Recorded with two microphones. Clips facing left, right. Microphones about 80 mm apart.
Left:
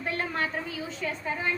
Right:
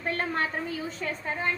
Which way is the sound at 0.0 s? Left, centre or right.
Right.